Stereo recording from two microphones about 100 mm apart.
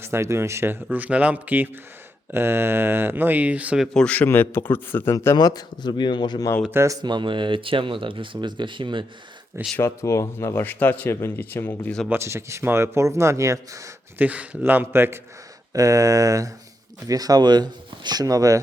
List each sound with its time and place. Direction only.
0.0 s speech: 25° right (ahead or behind)
3.9 s speech: 15° left (ahead or behind)
5.4 s speech: 40° left (ahead or behind)
6.7 s speech: 30° right (ahead or behind)
7.0 s speech: 50° right (ahead or behind)
9.7 s speech: 30° left (ahead or behind)
12.0 s speech: 25° right (ahead or behind)
14.2 s speech: 15° right (ahead or behind)
15.7 s speech: 35° right (ahead or behind)